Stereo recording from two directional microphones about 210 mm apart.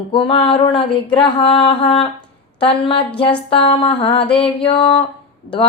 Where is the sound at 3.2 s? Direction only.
25° left (ahead or behind).